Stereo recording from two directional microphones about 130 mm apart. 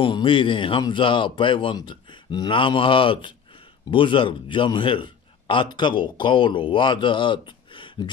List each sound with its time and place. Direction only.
0.0 s a man's voice: 40° left (ahead or behind)